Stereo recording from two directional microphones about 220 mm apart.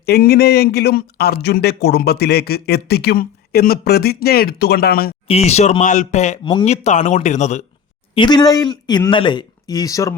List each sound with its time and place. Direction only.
0.0 s speech: 45° left (ahead or behind)
5.3 s speech: 30° left (ahead or behind)
6.5 s speech: 20° left (ahead or behind)
6.8 s speech: 35° left (ahead or behind)
8.1 s speech: 20° left (ahead or behind)